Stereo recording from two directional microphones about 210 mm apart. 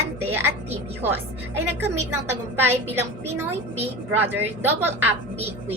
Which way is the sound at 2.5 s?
10° right (ahead or behind).